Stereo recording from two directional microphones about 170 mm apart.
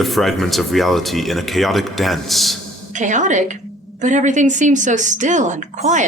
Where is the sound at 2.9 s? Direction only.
45° right (ahead or behind).